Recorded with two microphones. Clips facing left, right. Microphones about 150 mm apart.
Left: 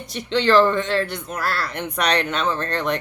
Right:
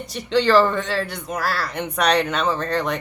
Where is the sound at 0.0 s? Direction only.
10° right (ahead or behind).